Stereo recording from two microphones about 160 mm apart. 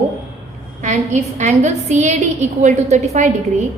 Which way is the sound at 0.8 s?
50° right (ahead or behind).